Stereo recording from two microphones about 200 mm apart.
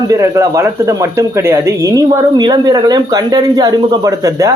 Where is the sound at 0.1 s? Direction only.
15° right (ahead or behind).